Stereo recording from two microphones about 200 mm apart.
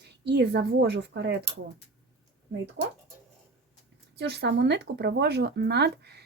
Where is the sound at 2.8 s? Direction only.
60° right (ahead or behind).